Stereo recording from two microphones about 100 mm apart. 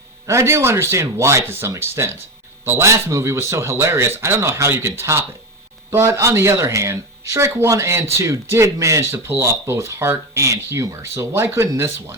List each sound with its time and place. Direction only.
0.3 s speech: 30° right (ahead or behind)